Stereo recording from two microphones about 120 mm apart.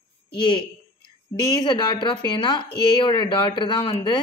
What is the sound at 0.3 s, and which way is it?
A woman's voice, 40° left (ahead or behind).